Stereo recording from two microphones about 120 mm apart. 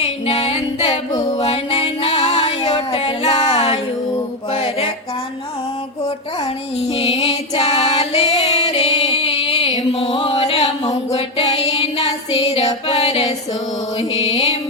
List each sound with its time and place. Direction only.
0.3 s female singing: 55° left (ahead or behind)
1.4 s music: 55° left (ahead or behind)
7.0 s music: 50° left (ahead or behind)